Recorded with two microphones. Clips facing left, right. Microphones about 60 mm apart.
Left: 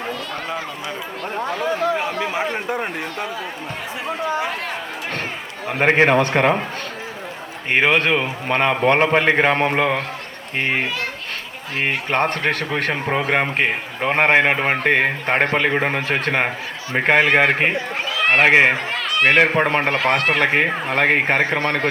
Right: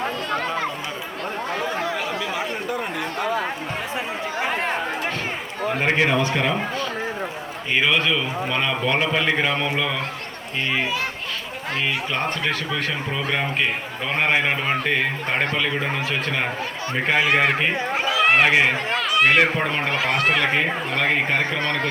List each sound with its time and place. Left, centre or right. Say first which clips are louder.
1.8 s chatter: left 4 dB; left
5.8 s a man's voice: left 6 dB; left
7.7 s a man's voice: left 4 dB; left
17.9 s a sound: right 1 dB; centre
18.4 s speech: left 4 dB; left
18.9 s a sound: right 1 dB; centre
19.2 s a man's voice: left 4 dB; left